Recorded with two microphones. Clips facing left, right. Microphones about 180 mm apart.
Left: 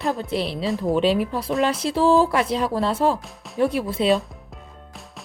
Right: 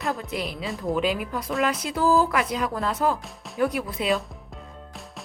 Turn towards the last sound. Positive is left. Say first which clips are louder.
# left 5 dB
turn(degrees=30)  # may be behind; listen again after turning